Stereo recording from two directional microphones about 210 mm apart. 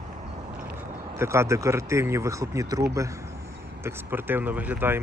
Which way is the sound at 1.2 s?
15° right (ahead or behind).